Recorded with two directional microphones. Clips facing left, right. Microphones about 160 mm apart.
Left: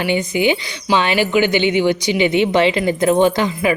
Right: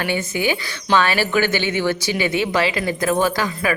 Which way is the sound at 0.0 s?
15° left (ahead or behind).